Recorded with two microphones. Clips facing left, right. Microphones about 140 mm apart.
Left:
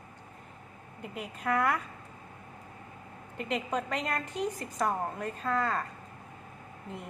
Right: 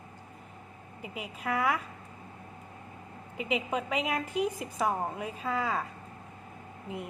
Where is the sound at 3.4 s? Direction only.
5° right (ahead or behind).